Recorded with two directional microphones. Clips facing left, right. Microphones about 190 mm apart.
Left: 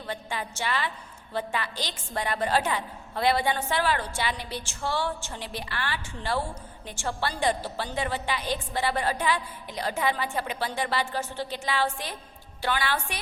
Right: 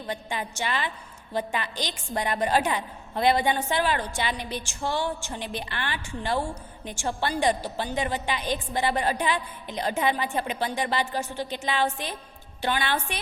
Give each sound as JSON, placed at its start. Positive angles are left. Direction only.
{"t": 0.1, "sound": "a woman's voice", "side_deg": -20}